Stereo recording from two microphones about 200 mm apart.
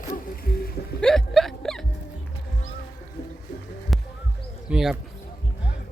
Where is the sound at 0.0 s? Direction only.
45° left (ahead or behind).